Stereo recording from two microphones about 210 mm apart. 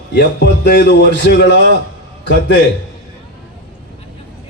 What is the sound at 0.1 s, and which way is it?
A man's voice, 55° left (ahead or behind).